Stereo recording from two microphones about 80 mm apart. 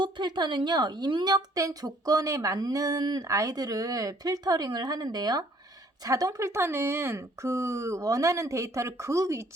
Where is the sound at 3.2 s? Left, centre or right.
Right.